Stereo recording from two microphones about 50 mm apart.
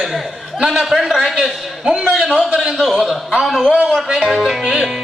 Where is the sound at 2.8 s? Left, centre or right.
Centre.